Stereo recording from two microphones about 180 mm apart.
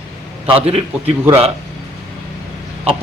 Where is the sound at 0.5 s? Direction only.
35° right (ahead or behind).